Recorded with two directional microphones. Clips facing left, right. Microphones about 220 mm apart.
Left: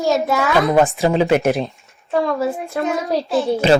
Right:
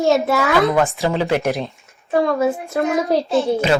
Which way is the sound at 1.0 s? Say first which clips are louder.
Left 3 dB; 15° left (ahead or behind).